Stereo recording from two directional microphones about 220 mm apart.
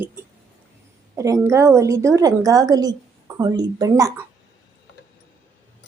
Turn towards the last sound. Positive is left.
turn(degrees=-15)  # may be behind; listen again after turning